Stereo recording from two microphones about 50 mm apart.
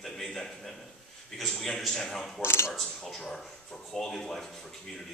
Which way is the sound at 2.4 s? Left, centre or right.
Left.